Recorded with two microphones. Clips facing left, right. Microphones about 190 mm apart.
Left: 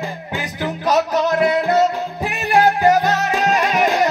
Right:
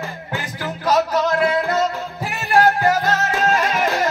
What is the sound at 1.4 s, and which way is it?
Music, 20° left (ahead or behind).